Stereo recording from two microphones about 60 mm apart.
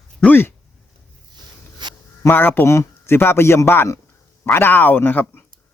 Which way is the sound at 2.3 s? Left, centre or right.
Left.